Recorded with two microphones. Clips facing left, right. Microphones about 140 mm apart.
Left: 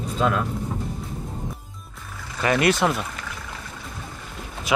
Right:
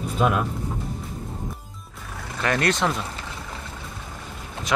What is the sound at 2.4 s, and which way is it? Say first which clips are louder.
Speech: left 3 dB; 5° left (ahead or behind).